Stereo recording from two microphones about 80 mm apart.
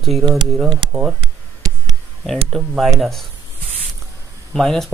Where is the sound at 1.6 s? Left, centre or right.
Right.